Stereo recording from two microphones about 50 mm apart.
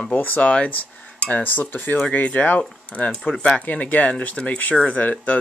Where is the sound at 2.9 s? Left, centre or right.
Left.